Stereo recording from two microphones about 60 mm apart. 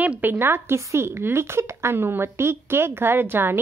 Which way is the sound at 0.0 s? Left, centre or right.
Right.